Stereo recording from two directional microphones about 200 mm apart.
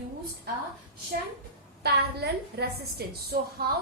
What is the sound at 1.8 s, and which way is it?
A woman's voice, 55° right (ahead or behind).